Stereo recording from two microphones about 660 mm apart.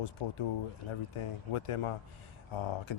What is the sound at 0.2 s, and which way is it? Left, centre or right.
Speech, left.